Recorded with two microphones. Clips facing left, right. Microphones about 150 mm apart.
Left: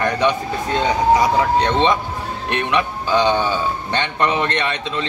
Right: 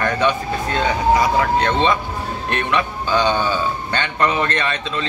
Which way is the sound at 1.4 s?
20° left (ahead or behind).